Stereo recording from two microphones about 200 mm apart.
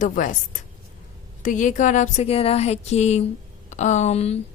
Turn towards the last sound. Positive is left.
turn(degrees=30)  # may be behind; listen again after turning